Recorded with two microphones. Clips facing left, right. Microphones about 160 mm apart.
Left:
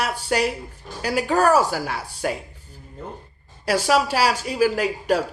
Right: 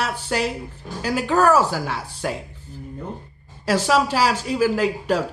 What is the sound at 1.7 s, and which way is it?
Speech, 10° left (ahead or behind).